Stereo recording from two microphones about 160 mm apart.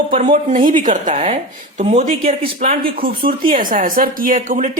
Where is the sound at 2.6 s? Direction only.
55° right (ahead or behind).